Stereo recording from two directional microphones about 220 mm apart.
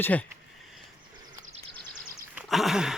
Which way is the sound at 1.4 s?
30° right (ahead or behind).